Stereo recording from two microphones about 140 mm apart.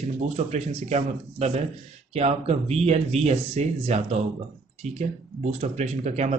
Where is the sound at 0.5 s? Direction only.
55° right (ahead or behind).